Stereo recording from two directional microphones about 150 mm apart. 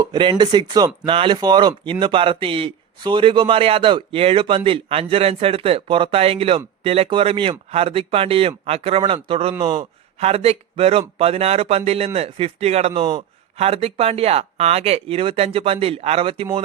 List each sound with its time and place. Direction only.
0.0 s speech: 30° right (ahead or behind)